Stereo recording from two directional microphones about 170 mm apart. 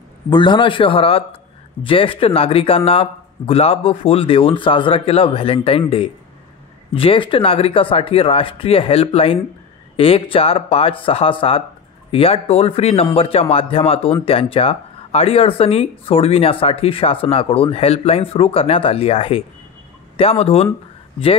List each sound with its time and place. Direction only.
0.3 s speech: 25° left (ahead or behind)